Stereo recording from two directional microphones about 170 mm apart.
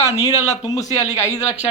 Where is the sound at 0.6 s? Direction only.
20° left (ahead or behind).